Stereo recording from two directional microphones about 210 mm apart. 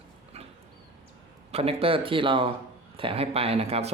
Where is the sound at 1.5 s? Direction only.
30° right (ahead or behind).